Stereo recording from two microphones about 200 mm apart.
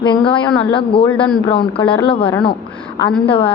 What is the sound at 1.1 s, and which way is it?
Speech, 5° left (ahead or behind).